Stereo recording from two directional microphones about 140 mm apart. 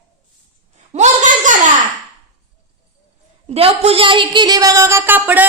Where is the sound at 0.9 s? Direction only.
60° right (ahead or behind).